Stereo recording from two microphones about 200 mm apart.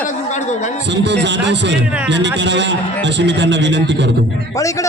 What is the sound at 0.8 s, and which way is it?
A man's voice, 60° right (ahead or behind).